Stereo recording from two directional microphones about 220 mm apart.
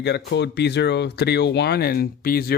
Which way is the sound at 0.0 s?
50° left (ahead or behind).